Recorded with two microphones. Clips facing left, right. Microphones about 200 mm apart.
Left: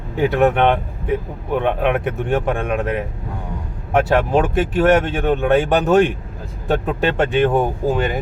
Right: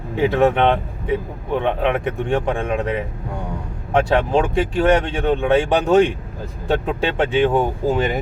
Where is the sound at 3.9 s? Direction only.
5° left (ahead or behind).